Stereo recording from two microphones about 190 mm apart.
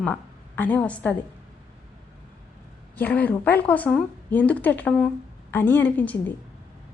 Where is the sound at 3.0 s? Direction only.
10° left (ahead or behind).